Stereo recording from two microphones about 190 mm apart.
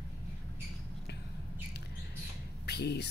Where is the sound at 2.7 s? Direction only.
60° left (ahead or behind).